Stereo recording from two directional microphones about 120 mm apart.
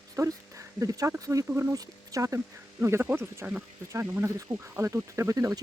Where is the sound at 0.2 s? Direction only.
25° right (ahead or behind).